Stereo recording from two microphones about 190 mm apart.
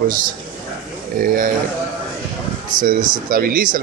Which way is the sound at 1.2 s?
45° right (ahead or behind).